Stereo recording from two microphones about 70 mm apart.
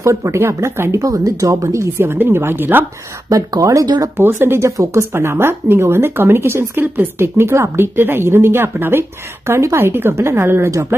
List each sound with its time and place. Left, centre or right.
0.0 s speech: right
1.1 s speech: right
2.0 s speech: right
3.2 s speech: right
3.8 s speech: right
4.2 s speech: right